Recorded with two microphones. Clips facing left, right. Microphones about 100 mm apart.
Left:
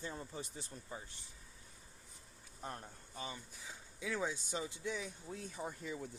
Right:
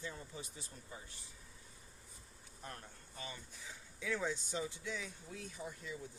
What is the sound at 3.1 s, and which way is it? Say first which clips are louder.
Speech: left 3 dB; 15° left (ahead or behind).